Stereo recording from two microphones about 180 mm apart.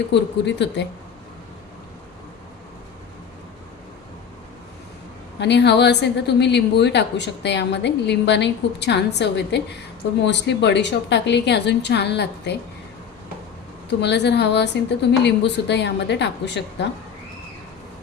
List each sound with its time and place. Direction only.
0.1 s a woman's voice: 75° left (ahead or behind)
5.4 s a woman's voice: 70° left (ahead or behind)
14.0 s a woman's voice: 70° left (ahead or behind)